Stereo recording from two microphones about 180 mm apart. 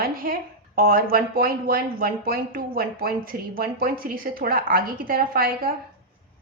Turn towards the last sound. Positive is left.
turn(degrees=-55)  # may be behind; listen again after turning